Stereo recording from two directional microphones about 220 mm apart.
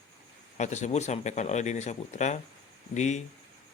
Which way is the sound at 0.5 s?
30° left (ahead or behind).